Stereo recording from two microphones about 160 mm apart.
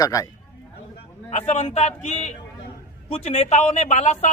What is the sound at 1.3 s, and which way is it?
Speech, 45° left (ahead or behind).